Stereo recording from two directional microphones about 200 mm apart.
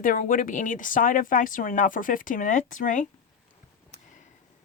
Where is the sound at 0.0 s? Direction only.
40° left (ahead or behind).